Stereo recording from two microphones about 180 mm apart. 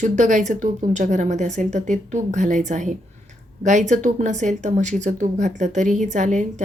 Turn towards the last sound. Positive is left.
turn(degrees=-40)  # may be behind; listen again after turning